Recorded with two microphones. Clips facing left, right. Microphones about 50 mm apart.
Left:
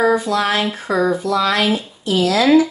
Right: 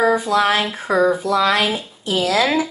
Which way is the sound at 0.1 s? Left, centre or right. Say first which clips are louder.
Right 1 dB; centre.